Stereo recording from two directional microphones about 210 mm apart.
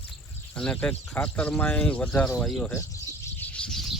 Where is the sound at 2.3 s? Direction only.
5° left (ahead or behind).